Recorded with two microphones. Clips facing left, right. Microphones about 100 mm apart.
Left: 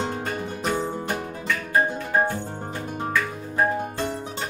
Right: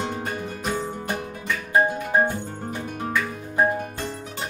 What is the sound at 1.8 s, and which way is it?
Music, 15° right (ahead or behind).